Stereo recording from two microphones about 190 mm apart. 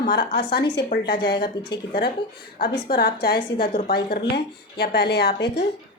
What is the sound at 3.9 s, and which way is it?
A woman's voice, 55° left (ahead or behind).